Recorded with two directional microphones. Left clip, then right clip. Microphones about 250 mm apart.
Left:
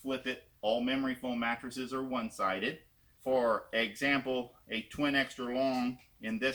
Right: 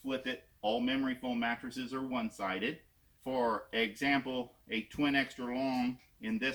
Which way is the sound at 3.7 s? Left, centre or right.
Centre.